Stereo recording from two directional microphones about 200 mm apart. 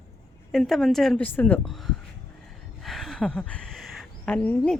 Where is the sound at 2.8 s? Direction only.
Centre (ahead or behind).